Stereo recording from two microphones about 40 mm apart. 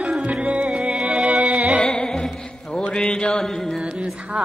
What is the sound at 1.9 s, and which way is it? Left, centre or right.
Music, centre.